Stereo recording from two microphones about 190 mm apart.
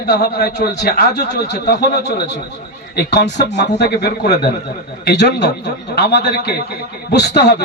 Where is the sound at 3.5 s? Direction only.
60° left (ahead or behind).